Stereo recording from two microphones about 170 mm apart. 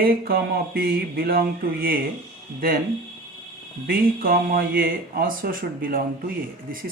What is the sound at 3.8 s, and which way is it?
Speech, 60° right (ahead or behind).